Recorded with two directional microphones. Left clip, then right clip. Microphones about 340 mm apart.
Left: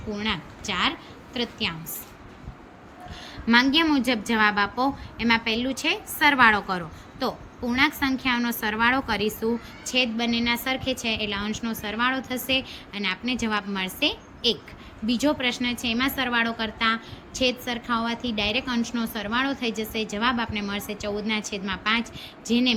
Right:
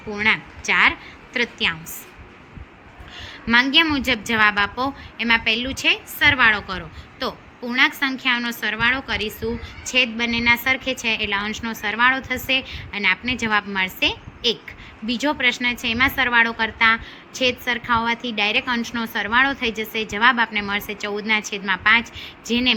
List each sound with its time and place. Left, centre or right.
0.1 s a woman's voice: centre
3.2 s a woman's voice: centre